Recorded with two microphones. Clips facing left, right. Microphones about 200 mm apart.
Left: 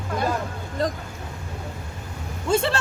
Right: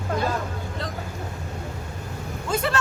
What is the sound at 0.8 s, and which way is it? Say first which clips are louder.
Vehicle: left 11 dB; 45° left (ahead or behind).